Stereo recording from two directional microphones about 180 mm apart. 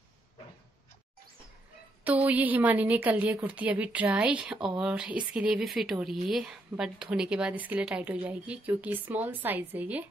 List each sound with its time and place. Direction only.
2.0 s a woman's voice: 10° right (ahead or behind)